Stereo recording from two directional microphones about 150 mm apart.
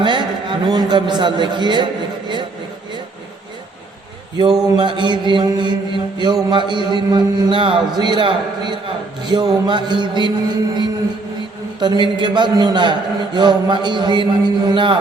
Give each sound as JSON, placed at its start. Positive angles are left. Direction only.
{"t": 0.0, "sound": "a sound", "side_deg": -30}
{"t": 4.8, "sound": "mantra", "side_deg": -30}
{"t": 6.1, "sound": "a man's voice", "side_deg": -30}